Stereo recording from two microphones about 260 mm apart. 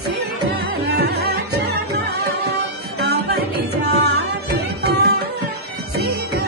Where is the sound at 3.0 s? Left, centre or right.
Right.